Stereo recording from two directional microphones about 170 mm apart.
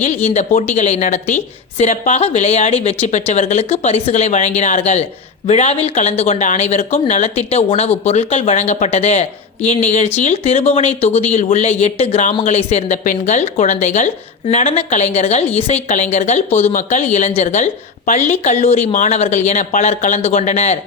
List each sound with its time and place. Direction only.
0.0 s speech: 40° left (ahead or behind)
14.4 s speech: 35° left (ahead or behind)